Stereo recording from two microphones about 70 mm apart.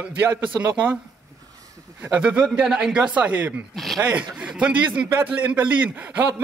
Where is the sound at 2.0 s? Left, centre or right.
Right.